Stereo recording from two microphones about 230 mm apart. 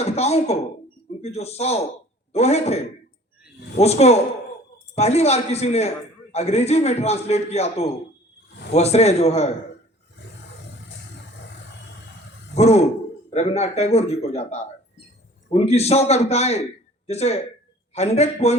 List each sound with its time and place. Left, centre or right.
0.0 s a man's voice: left
12.5 s a man's voice: left